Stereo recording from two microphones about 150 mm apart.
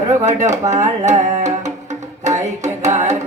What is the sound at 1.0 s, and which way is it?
Music, 50° right (ahead or behind).